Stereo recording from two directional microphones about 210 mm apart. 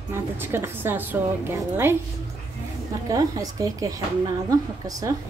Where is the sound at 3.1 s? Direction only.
15° right (ahead or behind).